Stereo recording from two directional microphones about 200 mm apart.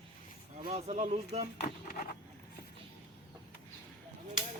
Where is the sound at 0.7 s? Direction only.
30° right (ahead or behind).